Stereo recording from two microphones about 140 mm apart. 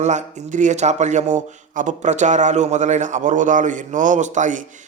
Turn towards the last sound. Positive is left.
turn(degrees=-65)  # may be behind; listen again after turning